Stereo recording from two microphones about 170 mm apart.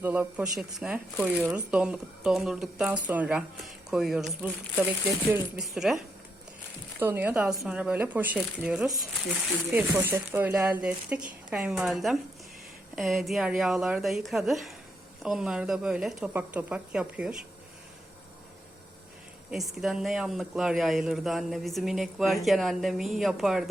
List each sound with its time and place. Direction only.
0.0 s speech: 10° right (ahead or behind)
7.0 s speech: 10° right (ahead or behind)
19.5 s speech: centre (ahead or behind)